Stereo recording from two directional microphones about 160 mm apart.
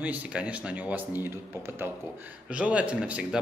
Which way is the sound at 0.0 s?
10° right (ahead or behind).